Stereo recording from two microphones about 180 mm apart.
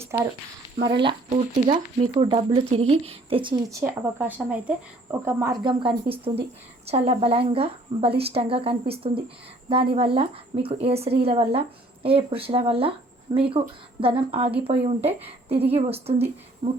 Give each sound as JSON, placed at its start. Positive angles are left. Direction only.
{"t": 0.0, "sound": "a sound", "side_deg": -15}
{"t": 0.8, "sound": "speech", "side_deg": -25}
{"t": 1.3, "sound": "a woman's voice", "side_deg": -40}
{"t": 3.5, "sound": "a woman's voice", "side_deg": -15}